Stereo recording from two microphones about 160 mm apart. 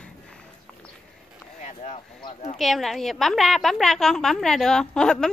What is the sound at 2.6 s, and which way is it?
A woman's voice, centre (ahead or behind).